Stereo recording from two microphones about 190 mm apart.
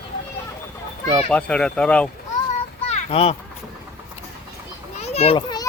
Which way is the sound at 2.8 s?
30° left (ahead or behind).